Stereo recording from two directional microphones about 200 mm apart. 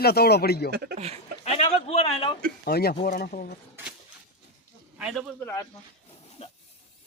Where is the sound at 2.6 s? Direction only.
50° left (ahead or behind).